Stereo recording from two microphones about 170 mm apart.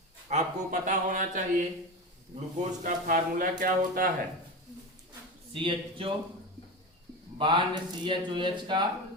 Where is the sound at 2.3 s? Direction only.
45° right (ahead or behind).